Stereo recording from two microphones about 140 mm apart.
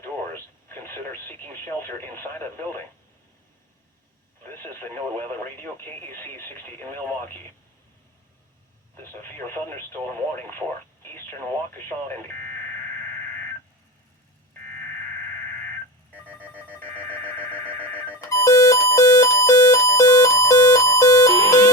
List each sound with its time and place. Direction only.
0.0 s radio: 15° left (ahead or behind)
4.4 s speech: 15° left (ahead or behind)
9.2 s speech: 15° left (ahead or behind)
17.5 s alarm clock: 15° left (ahead or behind)